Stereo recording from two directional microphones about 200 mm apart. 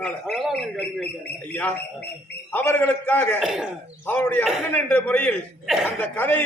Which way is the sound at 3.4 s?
Centre (ahead or behind).